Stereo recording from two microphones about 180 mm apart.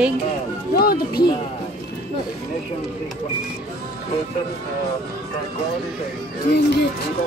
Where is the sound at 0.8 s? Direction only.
55° left (ahead or behind).